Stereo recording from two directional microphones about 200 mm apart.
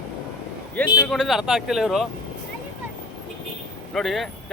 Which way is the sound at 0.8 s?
5° left (ahead or behind).